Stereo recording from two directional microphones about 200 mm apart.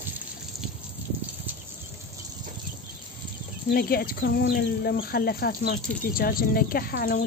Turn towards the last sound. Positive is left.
turn(degrees=45)  # may be behind; listen again after turning